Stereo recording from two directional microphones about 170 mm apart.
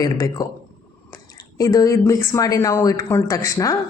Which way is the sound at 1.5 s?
20° left (ahead or behind).